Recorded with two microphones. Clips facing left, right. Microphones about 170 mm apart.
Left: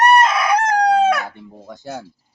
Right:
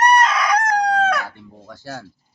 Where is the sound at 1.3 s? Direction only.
20° left (ahead or behind).